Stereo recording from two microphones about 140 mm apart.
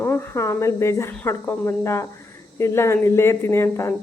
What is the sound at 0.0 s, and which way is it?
Speech, 20° left (ahead or behind).